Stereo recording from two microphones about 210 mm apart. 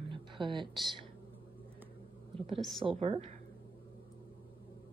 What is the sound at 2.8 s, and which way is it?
Speech, 25° right (ahead or behind).